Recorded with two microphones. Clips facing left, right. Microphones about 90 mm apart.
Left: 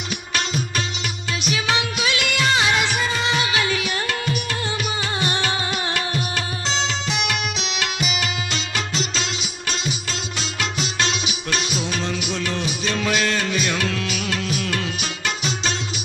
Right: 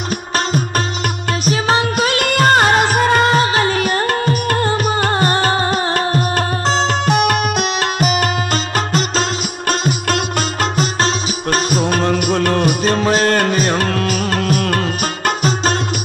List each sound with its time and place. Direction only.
1.4 s music: 40° right (ahead or behind)